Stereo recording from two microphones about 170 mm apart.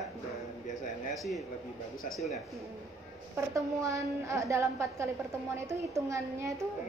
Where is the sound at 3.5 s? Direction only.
20° right (ahead or behind).